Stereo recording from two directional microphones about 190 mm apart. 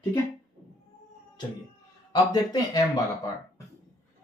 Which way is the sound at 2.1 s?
20° left (ahead or behind).